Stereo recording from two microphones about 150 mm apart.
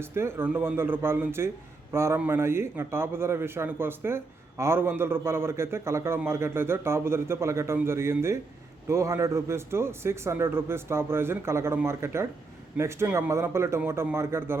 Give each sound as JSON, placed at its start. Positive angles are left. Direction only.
{"t": 0.0, "sound": "a man's voice", "side_deg": -15}